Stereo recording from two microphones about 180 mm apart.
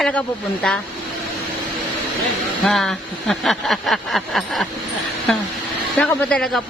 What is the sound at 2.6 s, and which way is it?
Speech, centre (ahead or behind).